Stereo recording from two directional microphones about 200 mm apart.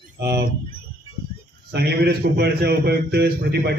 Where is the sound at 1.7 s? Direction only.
55° right (ahead or behind).